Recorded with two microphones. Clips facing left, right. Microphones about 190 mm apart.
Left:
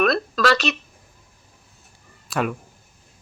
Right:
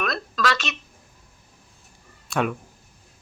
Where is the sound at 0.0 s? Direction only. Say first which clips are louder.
Left 6 dB; 35° left (ahead or behind).